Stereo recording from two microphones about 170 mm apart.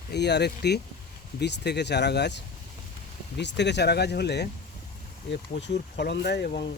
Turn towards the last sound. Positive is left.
turn(degrees=75)  # may be behind; listen again after turning